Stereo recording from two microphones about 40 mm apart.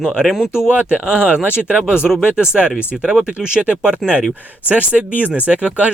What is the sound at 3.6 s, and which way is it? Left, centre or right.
Speech, right.